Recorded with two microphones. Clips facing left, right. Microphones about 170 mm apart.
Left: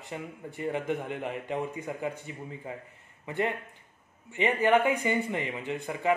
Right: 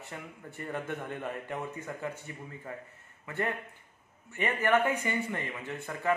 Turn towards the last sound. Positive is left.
turn(degrees=15)  # may be behind; listen again after turning